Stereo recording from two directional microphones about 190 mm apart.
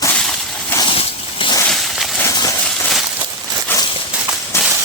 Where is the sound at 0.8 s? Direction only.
25° left (ahead or behind).